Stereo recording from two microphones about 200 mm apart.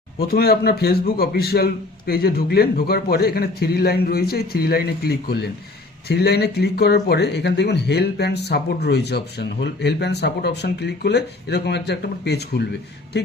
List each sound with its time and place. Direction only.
0.2 s a man's voice: 50° left (ahead or behind)